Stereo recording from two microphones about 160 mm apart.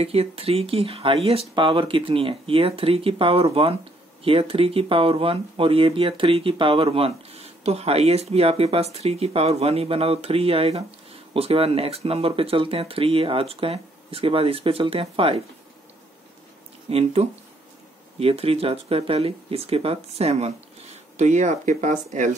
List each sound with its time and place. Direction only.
0.0 s speech: 40° right (ahead or behind)
16.9 s speech: 40° right (ahead or behind)